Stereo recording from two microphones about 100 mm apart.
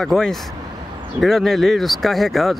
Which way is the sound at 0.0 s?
5° left (ahead or behind).